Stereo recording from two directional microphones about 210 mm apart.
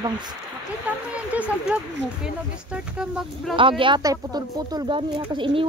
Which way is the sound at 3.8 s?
20° right (ahead or behind).